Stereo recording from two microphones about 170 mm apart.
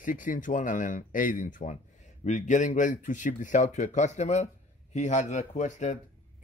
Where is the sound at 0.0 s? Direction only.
50° left (ahead or behind).